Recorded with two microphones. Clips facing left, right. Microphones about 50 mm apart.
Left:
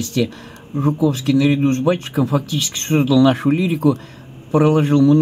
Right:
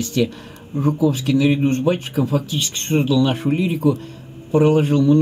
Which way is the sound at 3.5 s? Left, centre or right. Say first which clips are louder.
Left 2 dB; left.